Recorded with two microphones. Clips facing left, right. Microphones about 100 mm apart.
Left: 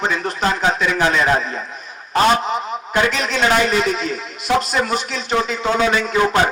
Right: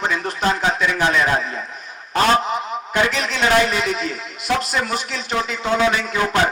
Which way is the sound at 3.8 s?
20° left (ahead or behind).